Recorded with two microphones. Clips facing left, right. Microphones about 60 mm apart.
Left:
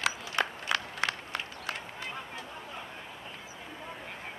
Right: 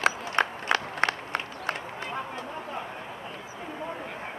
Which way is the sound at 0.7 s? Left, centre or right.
Right.